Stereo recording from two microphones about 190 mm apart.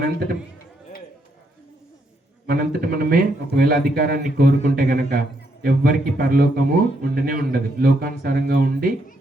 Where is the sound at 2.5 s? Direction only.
50° right (ahead or behind).